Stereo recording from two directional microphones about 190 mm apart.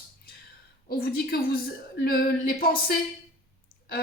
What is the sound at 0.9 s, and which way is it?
A woman's voice, 50° left (ahead or behind).